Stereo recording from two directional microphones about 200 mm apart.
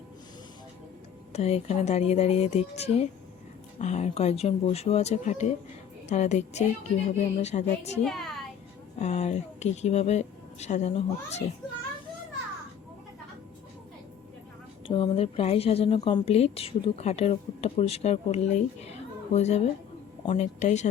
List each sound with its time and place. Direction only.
1.3 s a woman's voice: 30° left (ahead or behind)
8.0 s speech: centre (ahead or behind)
9.0 s a woman's voice: 35° left (ahead or behind)
14.8 s a woman's voice: 25° left (ahead or behind)